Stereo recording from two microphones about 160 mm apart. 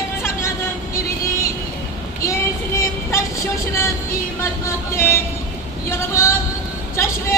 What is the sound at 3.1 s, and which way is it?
Speech, 20° left (ahead or behind).